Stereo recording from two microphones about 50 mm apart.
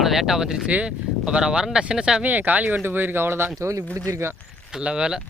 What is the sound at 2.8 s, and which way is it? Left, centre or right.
Speech, right.